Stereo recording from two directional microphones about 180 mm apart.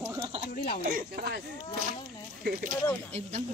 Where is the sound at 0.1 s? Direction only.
25° right (ahead or behind).